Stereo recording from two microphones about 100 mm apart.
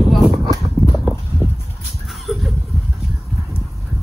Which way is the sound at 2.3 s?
Centre (ahead or behind).